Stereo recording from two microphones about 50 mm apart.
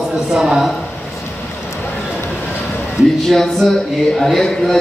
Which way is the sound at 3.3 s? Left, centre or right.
Centre.